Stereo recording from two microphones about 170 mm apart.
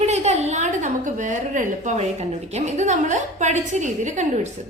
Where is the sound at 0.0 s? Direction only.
40° right (ahead or behind).